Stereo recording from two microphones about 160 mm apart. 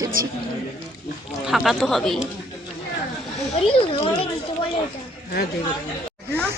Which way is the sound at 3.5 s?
35° left (ahead or behind).